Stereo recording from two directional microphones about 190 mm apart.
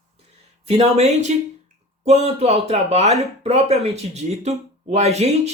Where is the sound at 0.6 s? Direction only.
35° right (ahead or behind).